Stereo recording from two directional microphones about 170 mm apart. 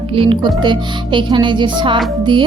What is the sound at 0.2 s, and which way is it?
Music, 30° right (ahead or behind).